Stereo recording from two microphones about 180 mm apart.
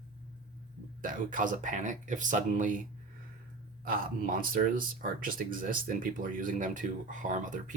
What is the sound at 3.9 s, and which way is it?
Speech, 50° right (ahead or behind).